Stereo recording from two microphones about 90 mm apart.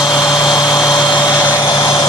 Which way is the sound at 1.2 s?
25° left (ahead or behind).